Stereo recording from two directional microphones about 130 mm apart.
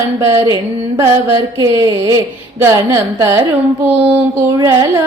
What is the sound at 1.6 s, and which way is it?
Music, 25° right (ahead or behind).